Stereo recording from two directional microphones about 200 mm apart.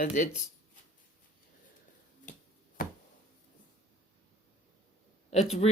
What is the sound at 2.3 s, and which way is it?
Finger snapping, 40° left (ahead or behind).